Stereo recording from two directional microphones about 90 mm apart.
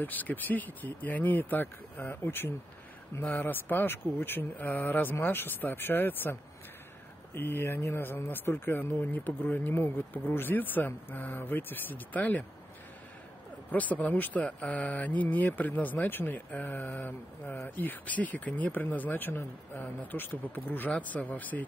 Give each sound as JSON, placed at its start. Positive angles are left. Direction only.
{"t": 0.0, "sound": "speech", "side_deg": 20}
{"t": 7.3, "sound": "speech", "side_deg": 25}
{"t": 13.7, "sound": "speech", "side_deg": 15}